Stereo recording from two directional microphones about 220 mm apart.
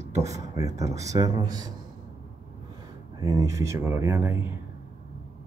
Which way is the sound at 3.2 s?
15° right (ahead or behind).